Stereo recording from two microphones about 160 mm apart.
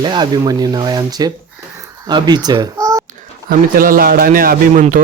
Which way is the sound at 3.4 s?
65° right (ahead or behind).